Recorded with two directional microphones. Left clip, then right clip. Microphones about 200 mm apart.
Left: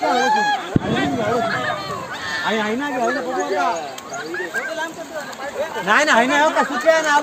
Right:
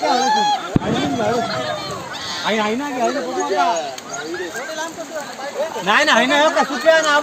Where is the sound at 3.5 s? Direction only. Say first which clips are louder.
Right 4 dB; 50° right (ahead or behind).